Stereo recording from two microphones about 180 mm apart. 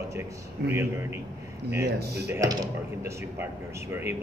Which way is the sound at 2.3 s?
15° right (ahead or behind).